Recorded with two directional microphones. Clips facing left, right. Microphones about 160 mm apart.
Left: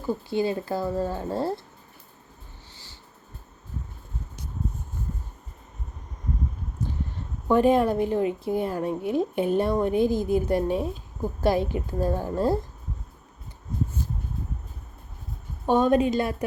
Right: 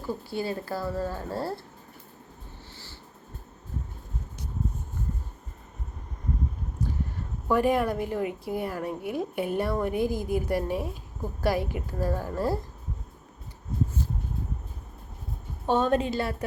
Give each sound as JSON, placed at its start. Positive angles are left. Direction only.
{"t": 0.3, "sound": "a woman's voice", "side_deg": 20}
{"t": 7.4, "sound": "a woman's voice", "side_deg": 25}
{"t": 15.6, "sound": "a woman's voice", "side_deg": 15}